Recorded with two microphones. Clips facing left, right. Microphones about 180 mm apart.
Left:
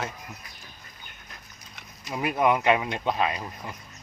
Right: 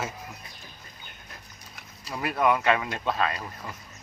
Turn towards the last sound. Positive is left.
turn(degrees=15)  # may be behind; listen again after turning